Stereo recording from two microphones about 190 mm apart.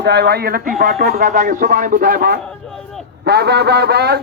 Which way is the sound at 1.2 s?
40° right (ahead or behind).